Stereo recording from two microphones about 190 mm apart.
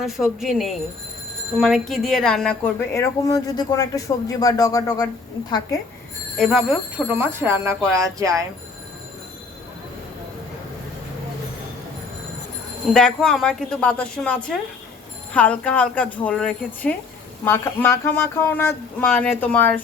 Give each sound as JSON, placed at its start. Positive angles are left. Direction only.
{"t": 0.0, "sound": "a woman's voice", "side_deg": 0}
{"t": 2.9, "sound": "speech", "side_deg": 15}
{"t": 6.3, "sound": "speech", "side_deg": 0}
{"t": 12.9, "sound": "a woman's voice", "side_deg": 5}